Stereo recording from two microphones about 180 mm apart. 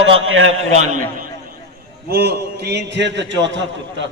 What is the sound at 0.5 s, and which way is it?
Speech, 40° right (ahead or behind).